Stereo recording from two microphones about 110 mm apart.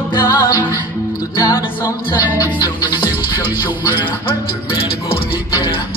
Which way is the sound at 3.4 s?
15° right (ahead or behind).